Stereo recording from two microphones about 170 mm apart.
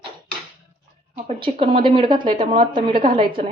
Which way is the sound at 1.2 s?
30° right (ahead or behind).